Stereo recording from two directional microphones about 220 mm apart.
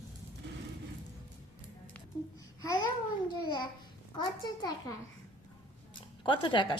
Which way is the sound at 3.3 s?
20° left (ahead or behind).